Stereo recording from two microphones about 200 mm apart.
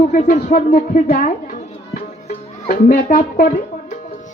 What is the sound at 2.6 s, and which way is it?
Speech, 50° left (ahead or behind).